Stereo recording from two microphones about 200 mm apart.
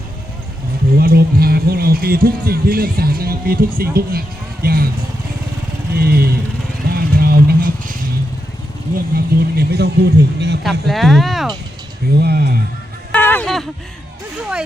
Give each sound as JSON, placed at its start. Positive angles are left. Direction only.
{"t": 0.9, "sound": "speech", "side_deg": -50}
{"t": 5.9, "sound": "speech", "side_deg": -50}
{"t": 6.8, "sound": "vehicle", "side_deg": -50}
{"t": 9.1, "sound": "speech", "side_deg": -50}
{"t": 10.6, "sound": "speech", "side_deg": 0}
{"t": 12.1, "sound": "speech", "side_deg": -50}
{"t": 13.1, "sound": "a sound", "side_deg": 10}